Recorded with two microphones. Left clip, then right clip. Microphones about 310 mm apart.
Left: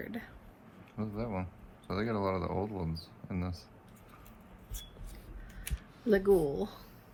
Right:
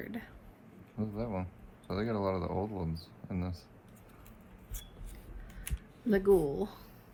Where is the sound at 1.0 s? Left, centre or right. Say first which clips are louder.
Even; left.